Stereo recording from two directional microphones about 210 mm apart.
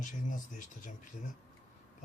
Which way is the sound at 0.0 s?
40° left (ahead or behind).